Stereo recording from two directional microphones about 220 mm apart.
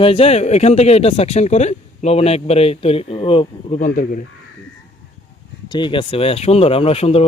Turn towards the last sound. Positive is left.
turn(degrees=25)  # may be behind; listen again after turning